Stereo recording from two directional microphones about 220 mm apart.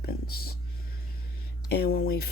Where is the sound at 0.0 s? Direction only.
45° left (ahead or behind).